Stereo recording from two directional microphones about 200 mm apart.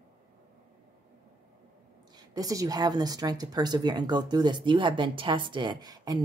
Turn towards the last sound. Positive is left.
turn(degrees=-20)  # may be behind; listen again after turning